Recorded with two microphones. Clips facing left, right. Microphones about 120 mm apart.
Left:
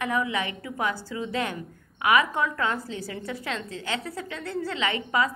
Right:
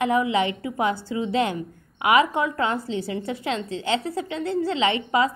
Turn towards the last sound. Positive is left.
turn(degrees=-25)  # may be behind; listen again after turning